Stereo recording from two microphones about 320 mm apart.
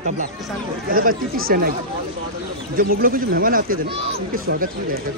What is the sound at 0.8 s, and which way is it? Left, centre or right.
Speech, right.